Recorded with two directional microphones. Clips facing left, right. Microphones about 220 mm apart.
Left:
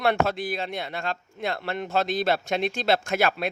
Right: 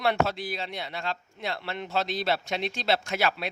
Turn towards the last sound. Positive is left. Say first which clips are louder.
# left 4 dB
turn(degrees=50)  # may be behind; listen again after turning